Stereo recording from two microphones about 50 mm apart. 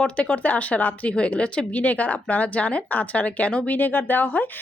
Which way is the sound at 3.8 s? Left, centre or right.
Left.